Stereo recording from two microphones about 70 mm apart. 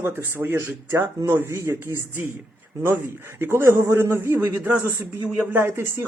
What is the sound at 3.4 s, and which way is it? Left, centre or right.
Speech, right.